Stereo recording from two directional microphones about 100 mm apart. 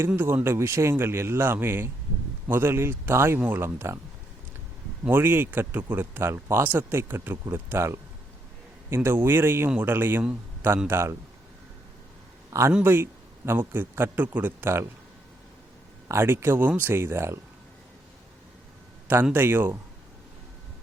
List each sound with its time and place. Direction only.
0.2 s speech: 25° right (ahead or behind)
5.0 s speech: 20° right (ahead or behind)
9.0 s speech: 25° right (ahead or behind)
12.8 s speech: 25° right (ahead or behind)
16.0 s speech: 25° right (ahead or behind)
19.0 s speech: 20° right (ahead or behind)